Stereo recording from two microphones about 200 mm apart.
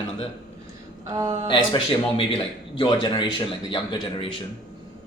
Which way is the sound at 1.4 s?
25° left (ahead or behind).